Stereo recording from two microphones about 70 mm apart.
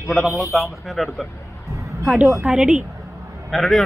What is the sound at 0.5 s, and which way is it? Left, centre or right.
A man's voice, centre.